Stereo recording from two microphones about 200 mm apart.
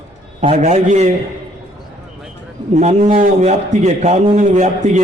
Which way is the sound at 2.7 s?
35° right (ahead or behind).